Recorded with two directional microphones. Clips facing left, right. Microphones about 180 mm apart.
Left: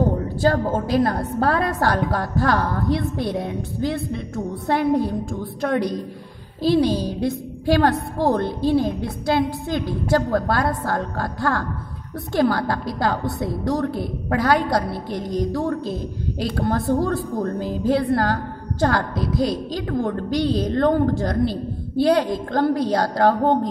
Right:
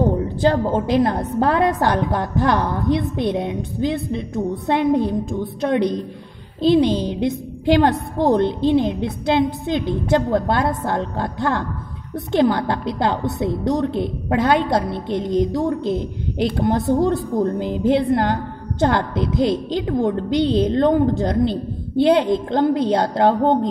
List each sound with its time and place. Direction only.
0.4 s a woman's voice: 20° right (ahead or behind)